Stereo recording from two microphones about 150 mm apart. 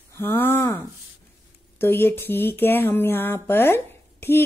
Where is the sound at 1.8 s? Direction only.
15° left (ahead or behind).